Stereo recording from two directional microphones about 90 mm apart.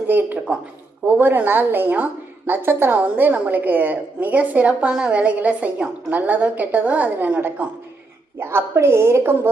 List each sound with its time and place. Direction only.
0.1 s a woman's voice: 20° right (ahead or behind)